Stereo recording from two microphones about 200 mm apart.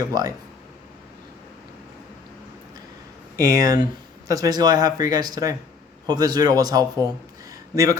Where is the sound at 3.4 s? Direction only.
15° right (ahead or behind).